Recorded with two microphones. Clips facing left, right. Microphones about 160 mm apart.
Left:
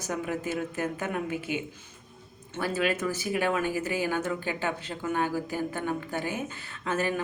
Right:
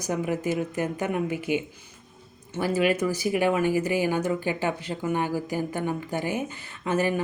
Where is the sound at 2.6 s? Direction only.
15° right (ahead or behind).